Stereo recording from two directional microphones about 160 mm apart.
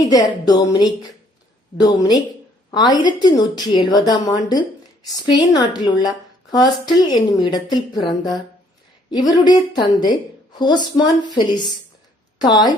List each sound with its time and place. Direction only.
0.1 s a woman's voice: 25° left (ahead or behind)